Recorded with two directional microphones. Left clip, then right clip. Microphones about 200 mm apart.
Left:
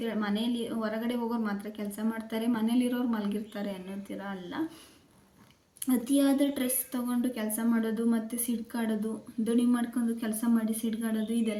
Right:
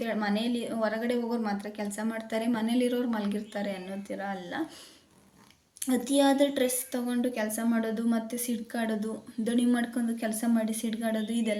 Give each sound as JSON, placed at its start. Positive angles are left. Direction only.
{"t": 0.0, "sound": "a woman's voice", "side_deg": -5}
{"t": 5.8, "sound": "a woman's voice", "side_deg": -5}